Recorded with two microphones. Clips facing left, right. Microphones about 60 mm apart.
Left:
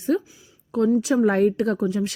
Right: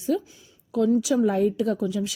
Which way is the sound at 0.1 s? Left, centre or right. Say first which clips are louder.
Left 3 dB; left.